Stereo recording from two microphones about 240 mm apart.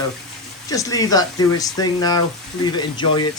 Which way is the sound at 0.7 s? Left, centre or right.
Centre.